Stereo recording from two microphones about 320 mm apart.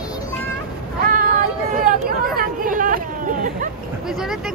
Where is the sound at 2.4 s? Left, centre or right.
Right.